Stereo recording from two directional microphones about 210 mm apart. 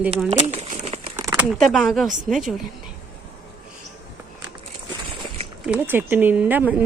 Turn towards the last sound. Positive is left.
turn(degrees=-10)  # may be behind; listen again after turning